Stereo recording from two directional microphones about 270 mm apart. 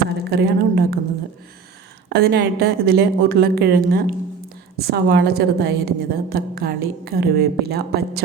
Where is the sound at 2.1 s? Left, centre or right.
Right.